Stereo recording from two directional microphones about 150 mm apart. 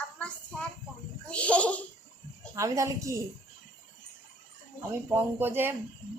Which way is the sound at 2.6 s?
20° right (ahead or behind).